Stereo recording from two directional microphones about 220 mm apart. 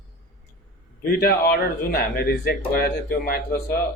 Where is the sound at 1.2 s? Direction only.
45° left (ahead or behind).